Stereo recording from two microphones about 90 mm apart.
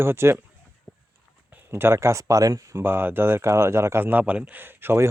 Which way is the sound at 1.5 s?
25° right (ahead or behind).